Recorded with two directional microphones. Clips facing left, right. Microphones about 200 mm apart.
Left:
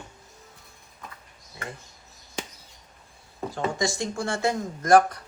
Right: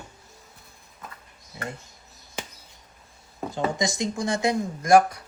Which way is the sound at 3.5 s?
20° right (ahead or behind).